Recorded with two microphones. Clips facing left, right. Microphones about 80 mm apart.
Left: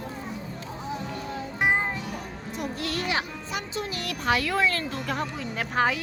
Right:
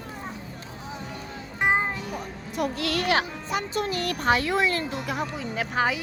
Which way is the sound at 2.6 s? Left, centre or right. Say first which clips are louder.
Right 5 dB; right.